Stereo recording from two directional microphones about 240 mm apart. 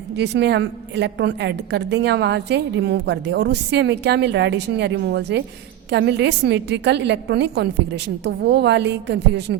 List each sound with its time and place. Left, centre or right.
0.2 s a woman's voice: right